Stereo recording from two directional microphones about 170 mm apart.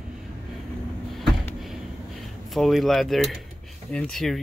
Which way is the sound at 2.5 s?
Centre (ahead or behind).